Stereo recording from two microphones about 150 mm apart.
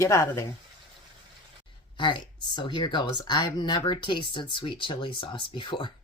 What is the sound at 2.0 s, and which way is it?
Speech, 30° left (ahead or behind).